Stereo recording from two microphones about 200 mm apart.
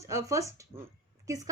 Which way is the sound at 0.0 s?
15° right (ahead or behind).